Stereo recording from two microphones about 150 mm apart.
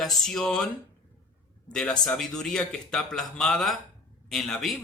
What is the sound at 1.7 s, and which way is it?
Speech, 5° left (ahead or behind).